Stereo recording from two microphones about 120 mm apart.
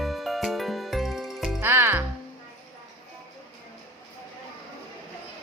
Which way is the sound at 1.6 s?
20° right (ahead or behind).